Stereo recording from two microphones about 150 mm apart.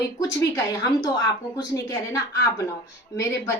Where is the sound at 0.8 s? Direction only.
25° left (ahead or behind).